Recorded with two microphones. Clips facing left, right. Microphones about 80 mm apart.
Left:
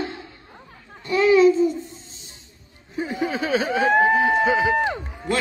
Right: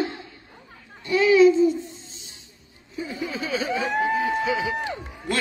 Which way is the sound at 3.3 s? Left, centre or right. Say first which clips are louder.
Left 4 dB; left.